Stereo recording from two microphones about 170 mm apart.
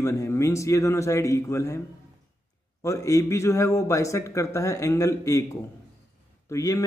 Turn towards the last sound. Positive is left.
turn(degrees=20)  # may be behind; listen again after turning